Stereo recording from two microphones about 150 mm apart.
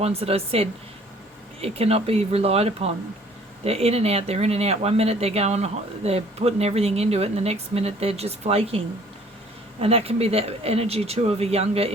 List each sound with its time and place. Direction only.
0.0 s speech: 40° right (ahead or behind)
9.8 s speech: 40° right (ahead or behind)